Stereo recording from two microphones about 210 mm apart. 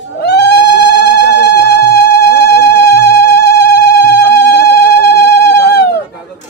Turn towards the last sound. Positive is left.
turn(degrees=50)  # may be behind; listen again after turning